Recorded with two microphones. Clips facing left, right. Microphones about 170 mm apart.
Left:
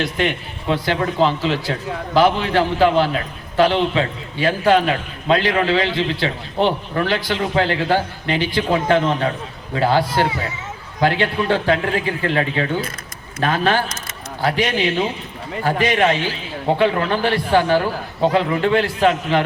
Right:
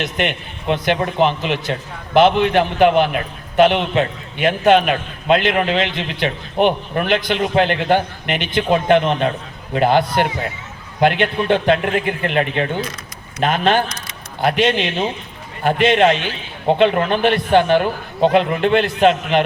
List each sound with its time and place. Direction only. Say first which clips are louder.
0.0 s a man's voice: left 1 dB; 20° right (ahead or behind)